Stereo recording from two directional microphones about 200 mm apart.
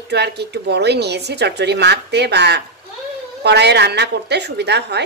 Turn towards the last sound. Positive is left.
turn(degrees=-55)  # may be behind; listen again after turning